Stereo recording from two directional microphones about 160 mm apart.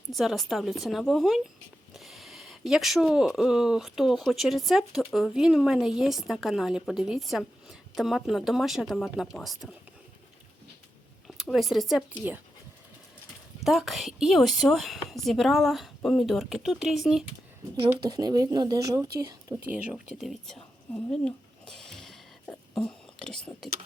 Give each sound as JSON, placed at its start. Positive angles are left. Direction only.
{"t": 0.1, "sound": "speech", "side_deg": 0}
{"t": 11.3, "sound": "speech", "side_deg": 0}
{"t": 13.6, "sound": "speech", "side_deg": 0}
{"t": 18.0, "sound": "speech", "side_deg": -25}
{"t": 19.7, "sound": "a sound", "side_deg": -10}